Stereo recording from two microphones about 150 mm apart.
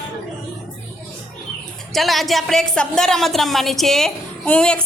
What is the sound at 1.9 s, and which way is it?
A woman's voice, centre (ahead or behind).